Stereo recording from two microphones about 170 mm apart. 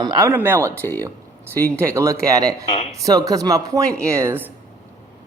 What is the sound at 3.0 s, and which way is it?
A man's voice, 20° right (ahead or behind).